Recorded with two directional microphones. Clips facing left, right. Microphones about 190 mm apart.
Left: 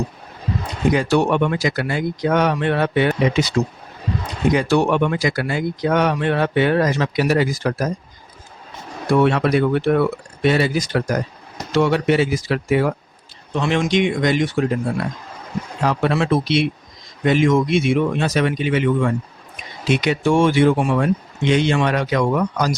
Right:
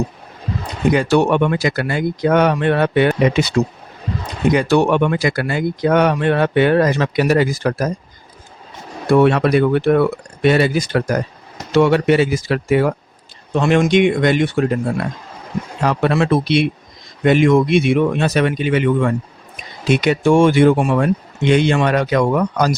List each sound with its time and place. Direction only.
0.9 s speech: 60° right (ahead or behind)
4.5 s speech: 65° right (ahead or behind)
9.1 s speech: 55° right (ahead or behind)
15.8 s speech: 60° right (ahead or behind)